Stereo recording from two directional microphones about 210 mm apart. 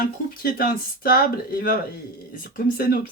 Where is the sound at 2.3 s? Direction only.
40° left (ahead or behind).